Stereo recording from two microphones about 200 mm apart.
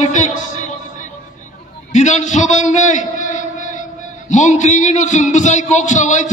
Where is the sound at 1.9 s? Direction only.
35° left (ahead or behind).